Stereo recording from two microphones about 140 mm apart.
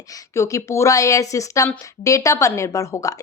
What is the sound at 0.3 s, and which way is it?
Speech, 20° left (ahead or behind).